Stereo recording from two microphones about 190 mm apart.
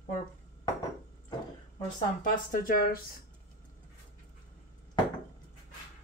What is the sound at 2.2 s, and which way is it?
Speech, 50° left (ahead or behind).